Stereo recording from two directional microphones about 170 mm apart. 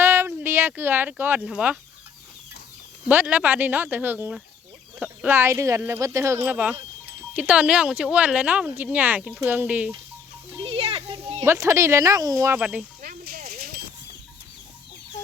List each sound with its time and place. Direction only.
0.0 s speech: 15° right (ahead or behind)
3.1 s speech: 10° right (ahead or behind)
10.6 s a sound: 35° right (ahead or behind)
11.4 s speech: 15° right (ahead or behind)
12.5 s speech: 5° right (ahead or behind)
13.0 s a sound: 60° right (ahead or behind)